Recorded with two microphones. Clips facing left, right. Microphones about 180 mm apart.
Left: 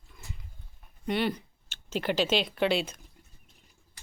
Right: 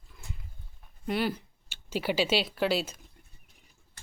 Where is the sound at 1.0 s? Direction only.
5° right (ahead or behind).